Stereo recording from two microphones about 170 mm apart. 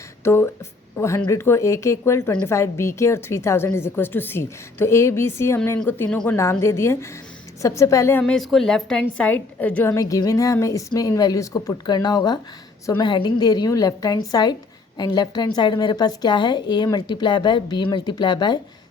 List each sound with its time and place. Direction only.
0.3 s a woman's voice: 15° left (ahead or behind)
8.2 s a woman's voice: centre (ahead or behind); by 18.6 s 25° left (ahead or behind)